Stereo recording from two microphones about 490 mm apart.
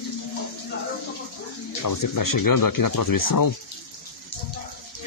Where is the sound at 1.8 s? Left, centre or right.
Left.